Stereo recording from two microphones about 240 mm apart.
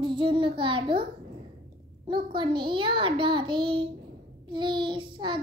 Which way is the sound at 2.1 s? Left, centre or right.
Centre.